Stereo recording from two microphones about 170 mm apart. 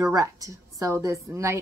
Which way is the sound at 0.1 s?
20° right (ahead or behind).